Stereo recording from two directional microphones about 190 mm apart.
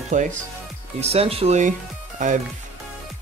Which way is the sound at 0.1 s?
40° right (ahead or behind).